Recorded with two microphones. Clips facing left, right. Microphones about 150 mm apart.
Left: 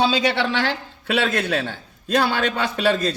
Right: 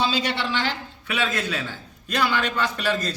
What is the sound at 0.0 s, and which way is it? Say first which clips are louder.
Speech: left 5 dB; 65° left (ahead or behind).